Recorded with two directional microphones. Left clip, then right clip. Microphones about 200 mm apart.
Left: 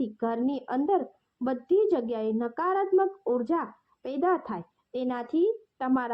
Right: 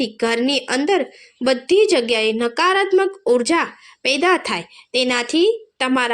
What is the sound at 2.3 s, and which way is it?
A woman's voice, 45° right (ahead or behind).